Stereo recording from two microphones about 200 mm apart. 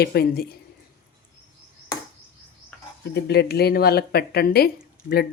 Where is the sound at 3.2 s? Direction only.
55° left (ahead or behind).